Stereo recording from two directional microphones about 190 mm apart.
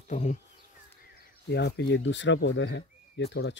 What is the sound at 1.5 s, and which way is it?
Speech, 65° left (ahead or behind).